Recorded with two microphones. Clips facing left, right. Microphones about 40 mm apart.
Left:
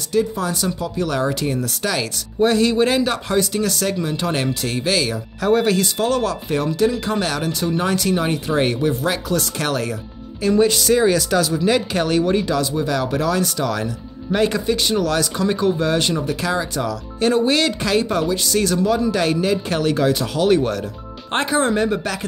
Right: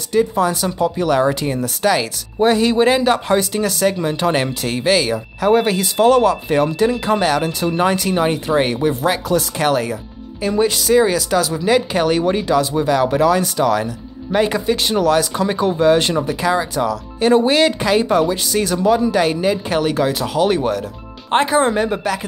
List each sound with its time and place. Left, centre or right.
0.1 s speech: right
16.3 s speech: centre